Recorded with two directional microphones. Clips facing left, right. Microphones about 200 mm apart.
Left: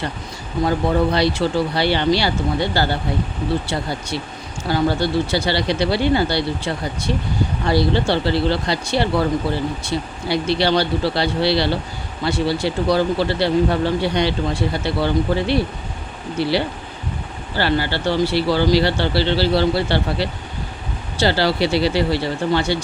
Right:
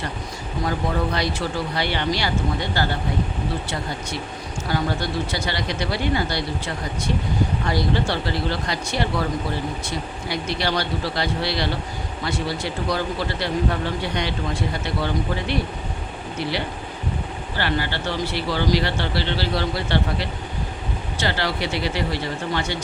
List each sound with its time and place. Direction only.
1.1 s speech: 30° left (ahead or behind)
7.7 s speech: 30° left (ahead or behind)